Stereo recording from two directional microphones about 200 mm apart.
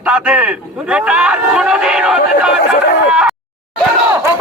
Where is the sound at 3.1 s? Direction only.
5° right (ahead or behind).